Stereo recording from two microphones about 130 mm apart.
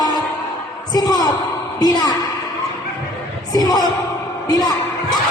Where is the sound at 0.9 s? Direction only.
30° left (ahead or behind).